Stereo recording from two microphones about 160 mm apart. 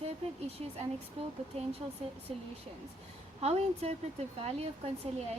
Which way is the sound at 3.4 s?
40° right (ahead or behind).